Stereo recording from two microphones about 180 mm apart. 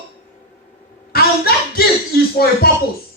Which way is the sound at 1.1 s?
60° left (ahead or behind).